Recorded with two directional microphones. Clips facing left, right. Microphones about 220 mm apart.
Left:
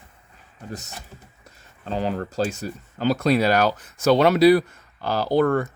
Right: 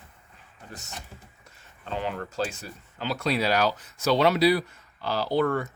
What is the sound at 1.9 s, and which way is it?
Speech, 35° left (ahead or behind).